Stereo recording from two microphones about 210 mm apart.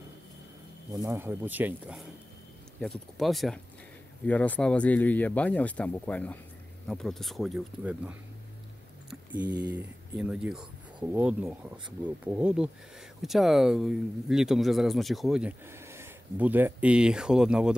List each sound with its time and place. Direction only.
0.9 s speech: 15° right (ahead or behind)
9.4 s speech: 20° right (ahead or behind)
9.7 s speech: 5° right (ahead or behind)